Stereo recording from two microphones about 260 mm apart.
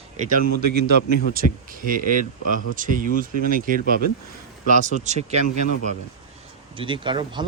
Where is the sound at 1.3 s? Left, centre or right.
Right.